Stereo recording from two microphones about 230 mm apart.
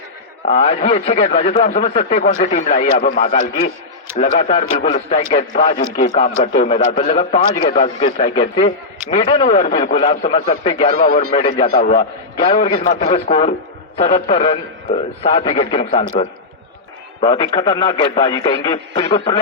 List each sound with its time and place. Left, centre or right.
0.4 s a man's voice: left
8.6 s a man's voice: left
17.2 s a man's voice: left